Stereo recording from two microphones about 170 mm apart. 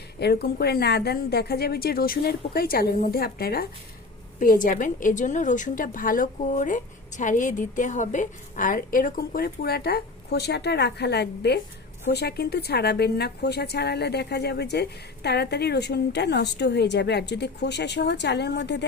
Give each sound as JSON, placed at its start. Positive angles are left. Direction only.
{"t": 0.2, "sound": "a woman's voice", "side_deg": 70}
{"t": 4.4, "sound": "a woman's voice", "side_deg": 50}